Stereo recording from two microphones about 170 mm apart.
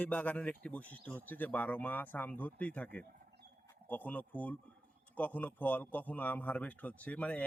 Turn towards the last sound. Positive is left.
turn(degrees=10)  # may be behind; listen again after turning